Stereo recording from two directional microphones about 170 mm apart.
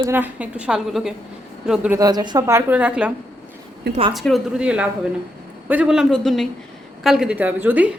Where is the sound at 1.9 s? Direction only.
20° right (ahead or behind).